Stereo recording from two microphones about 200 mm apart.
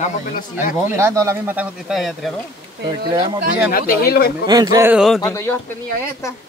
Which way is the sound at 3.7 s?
50° left (ahead or behind).